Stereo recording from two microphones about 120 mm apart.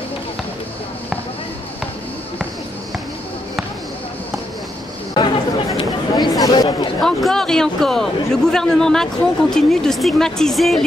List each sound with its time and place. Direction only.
5.2 s chatter: 35° left (ahead or behind)
5.8 s a sound: 35° left (ahead or behind)
6.4 s chatter: 35° left (ahead or behind)
7.0 s a man's voice: centre (ahead or behind)